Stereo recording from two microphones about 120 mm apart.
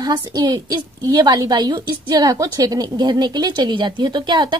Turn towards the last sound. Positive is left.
turn(degrees=-40)  # may be behind; listen again after turning